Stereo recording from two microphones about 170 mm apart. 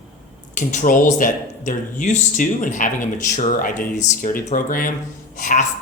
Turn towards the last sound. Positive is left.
turn(degrees=50)  # may be behind; listen again after turning